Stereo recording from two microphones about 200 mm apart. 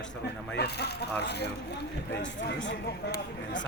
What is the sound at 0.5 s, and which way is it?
Speech, 55° left (ahead or behind).